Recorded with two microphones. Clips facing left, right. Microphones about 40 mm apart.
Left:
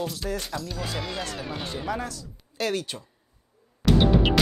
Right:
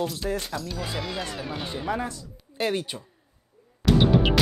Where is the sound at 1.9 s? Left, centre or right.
Right.